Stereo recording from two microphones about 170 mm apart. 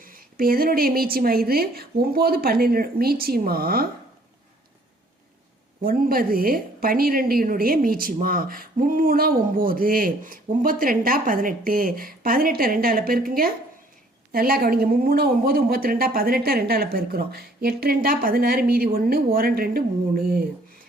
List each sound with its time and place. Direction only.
0.0 s a woman's voice: 55° right (ahead or behind)
5.8 s a woman's voice: 60° right (ahead or behind)